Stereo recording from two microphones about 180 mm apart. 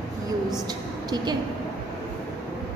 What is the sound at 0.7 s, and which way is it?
Speech, 20° right (ahead or behind).